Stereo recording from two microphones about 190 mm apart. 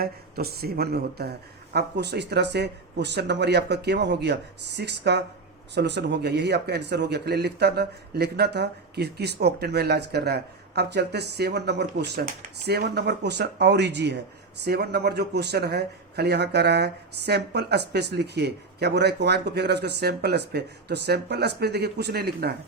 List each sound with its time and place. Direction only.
0.0 s speech: 55° right (ahead or behind)